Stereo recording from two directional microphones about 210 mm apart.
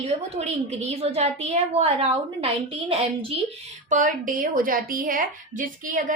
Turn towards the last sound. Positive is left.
turn(degrees=-40)  # may be behind; listen again after turning